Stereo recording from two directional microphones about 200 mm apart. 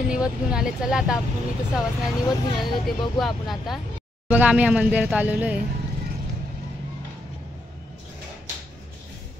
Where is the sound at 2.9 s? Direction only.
Centre (ahead or behind).